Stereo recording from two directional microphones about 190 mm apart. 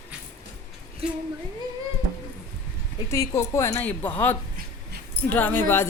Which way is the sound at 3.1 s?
15° left (ahead or behind).